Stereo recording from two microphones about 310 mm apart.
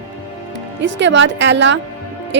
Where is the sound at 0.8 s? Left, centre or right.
Right.